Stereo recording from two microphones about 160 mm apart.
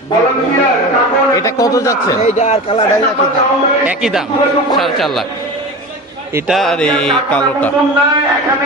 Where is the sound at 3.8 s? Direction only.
5° right (ahead or behind).